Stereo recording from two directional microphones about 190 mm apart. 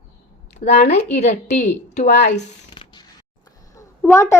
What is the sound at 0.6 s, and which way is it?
Speech, 35° left (ahead or behind).